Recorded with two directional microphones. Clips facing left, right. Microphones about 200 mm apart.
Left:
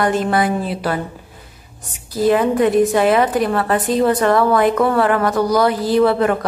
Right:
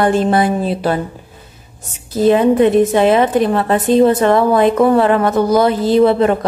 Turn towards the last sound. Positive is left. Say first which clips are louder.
# right 3 dB
turn(degrees=-25)  # may be behind; listen again after turning